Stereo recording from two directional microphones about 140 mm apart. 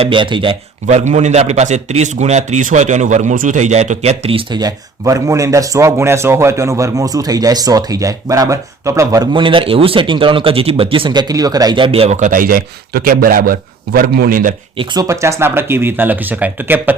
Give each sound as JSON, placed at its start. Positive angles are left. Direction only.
{"t": 0.0, "sound": "speech", "side_deg": -35}
{"t": 0.9, "sound": "a man's voice", "side_deg": -55}
{"t": 4.6, "sound": "speech", "side_deg": -25}
{"t": 12.1, "sound": "a man's voice", "side_deg": -65}
{"t": 14.8, "sound": "speech", "side_deg": -25}